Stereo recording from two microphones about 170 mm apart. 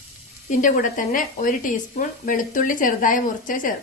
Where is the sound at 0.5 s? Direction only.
50° left (ahead or behind).